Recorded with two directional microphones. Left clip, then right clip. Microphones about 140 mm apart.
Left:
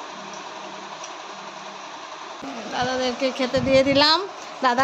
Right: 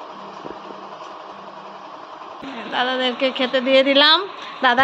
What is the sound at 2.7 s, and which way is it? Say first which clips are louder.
Speech: right 4 dB; 10° left (ahead or behind).